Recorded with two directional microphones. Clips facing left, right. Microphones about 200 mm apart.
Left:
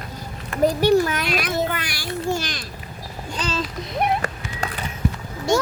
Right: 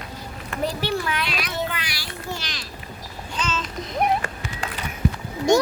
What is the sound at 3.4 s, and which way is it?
Speech, 35° left (ahead or behind).